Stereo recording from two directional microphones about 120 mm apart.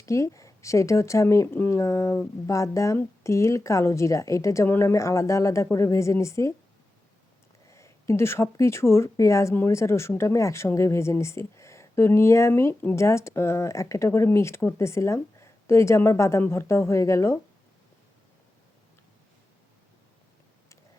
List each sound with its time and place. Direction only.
0.0 s speech: 25° left (ahead or behind)
7.7 s speech: 25° left (ahead or behind)